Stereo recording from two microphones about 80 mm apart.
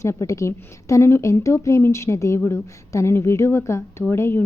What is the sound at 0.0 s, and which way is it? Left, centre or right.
A woman's voice, left.